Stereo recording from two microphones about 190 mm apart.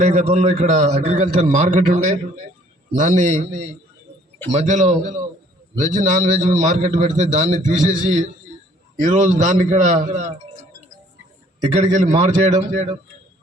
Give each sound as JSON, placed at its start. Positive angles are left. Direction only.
{"t": 0.0, "sound": "a man's voice", "side_deg": -35}
{"t": 4.5, "sound": "a man's voice", "side_deg": -40}
{"t": 11.7, "sound": "a man's voice", "side_deg": -35}